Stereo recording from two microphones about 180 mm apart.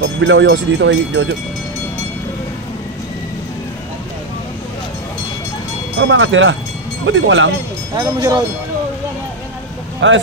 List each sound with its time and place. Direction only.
0.0 s speech: 90° right
5.9 s speech: 90° right
7.9 s speech: 20° right (ahead or behind)
9.9 s speech: 90° right